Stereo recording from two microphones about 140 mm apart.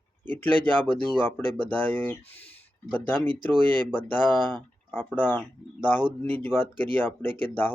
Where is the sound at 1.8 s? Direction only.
15° left (ahead or behind).